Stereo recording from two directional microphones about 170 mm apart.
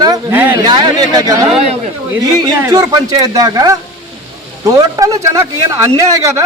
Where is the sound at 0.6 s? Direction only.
25° right (ahead or behind).